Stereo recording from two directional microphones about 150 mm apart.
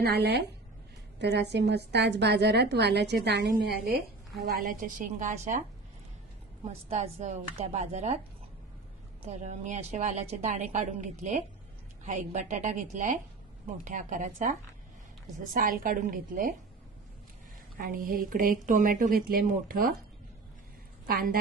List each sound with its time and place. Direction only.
0.0 s a woman's voice: 90° right
1.7 s a woman's voice: 90° right
4.4 s a woman's voice: 70° right (ahead or behind)
6.9 s a woman's voice: 50° right (ahead or behind)
9.2 s a woman's voice: 55° right (ahead or behind)
15.5 s a woman's voice: 70° right (ahead or behind)
17.7 s a woman's voice: 70° right (ahead or behind)
21.1 s a woman's voice: 70° right (ahead or behind)